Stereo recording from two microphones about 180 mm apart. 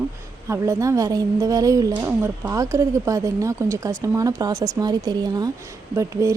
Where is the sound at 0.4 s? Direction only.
15° right (ahead or behind).